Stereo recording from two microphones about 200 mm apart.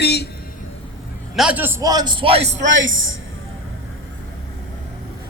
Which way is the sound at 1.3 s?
5° right (ahead or behind).